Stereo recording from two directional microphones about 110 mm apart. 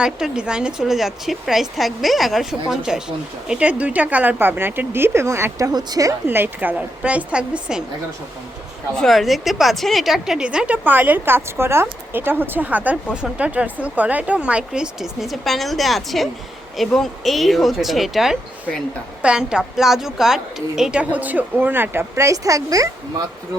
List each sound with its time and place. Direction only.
0.0 s a woman's voice: 10° right (ahead or behind); by 6.1 s 35° right (ahead or behind)
6.2 s a woman's voice: 20° right (ahead or behind)
9.0 s a woman's voice: centre (ahead or behind); by 22.9 s 30° right (ahead or behind)